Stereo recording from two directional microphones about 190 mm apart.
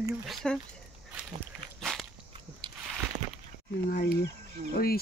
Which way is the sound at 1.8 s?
Centre (ahead or behind).